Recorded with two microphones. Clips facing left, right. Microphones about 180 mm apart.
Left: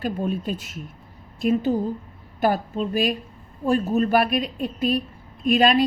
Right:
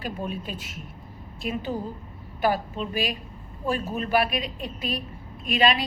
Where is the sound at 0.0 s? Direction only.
45° left (ahead or behind).